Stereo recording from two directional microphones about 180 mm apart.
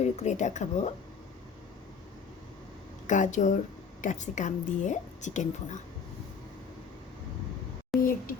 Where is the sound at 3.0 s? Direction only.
45° left (ahead or behind).